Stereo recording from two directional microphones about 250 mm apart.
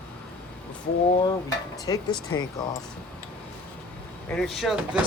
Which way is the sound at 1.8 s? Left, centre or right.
Centre.